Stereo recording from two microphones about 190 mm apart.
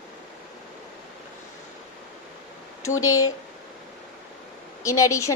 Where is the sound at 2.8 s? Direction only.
90° left.